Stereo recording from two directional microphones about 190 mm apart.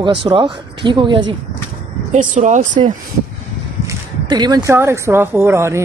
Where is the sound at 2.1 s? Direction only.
40° right (ahead or behind).